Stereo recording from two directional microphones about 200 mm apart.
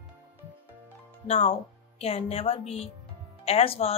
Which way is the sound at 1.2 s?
35° left (ahead or behind).